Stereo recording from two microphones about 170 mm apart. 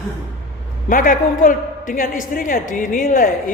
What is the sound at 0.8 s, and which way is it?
A man's voice, 55° left (ahead or behind).